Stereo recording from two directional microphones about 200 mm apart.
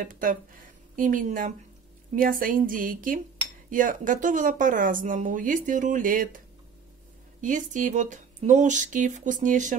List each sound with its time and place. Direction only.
0.1 s a woman's voice: 40° right (ahead or behind)
7.4 s speech: 40° right (ahead or behind)